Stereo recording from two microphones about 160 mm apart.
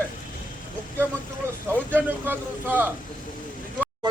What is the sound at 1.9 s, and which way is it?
Speech, 10° right (ahead or behind).